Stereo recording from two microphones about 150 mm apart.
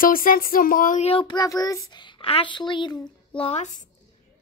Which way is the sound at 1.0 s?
35° left (ahead or behind).